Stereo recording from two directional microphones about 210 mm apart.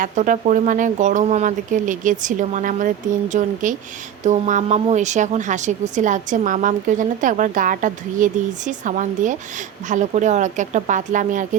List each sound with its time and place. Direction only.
0.0 s a woman's voice: 35° right (ahead or behind)